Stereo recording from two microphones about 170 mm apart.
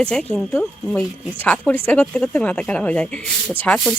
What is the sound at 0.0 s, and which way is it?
Speech, 5° left (ahead or behind).